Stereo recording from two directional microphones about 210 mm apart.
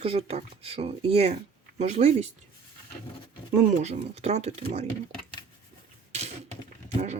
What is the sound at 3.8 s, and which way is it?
Speech, 30° right (ahead or behind).